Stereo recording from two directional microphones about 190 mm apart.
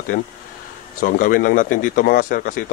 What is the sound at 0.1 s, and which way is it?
Speech, 50° left (ahead or behind).